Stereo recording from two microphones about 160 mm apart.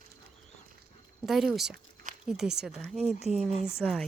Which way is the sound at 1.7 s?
55° right (ahead or behind).